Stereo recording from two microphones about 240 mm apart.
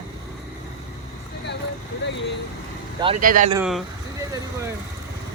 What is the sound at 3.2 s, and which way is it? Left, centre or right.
Speech, right.